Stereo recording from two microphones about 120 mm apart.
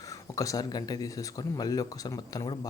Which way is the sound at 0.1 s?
30° left (ahead or behind).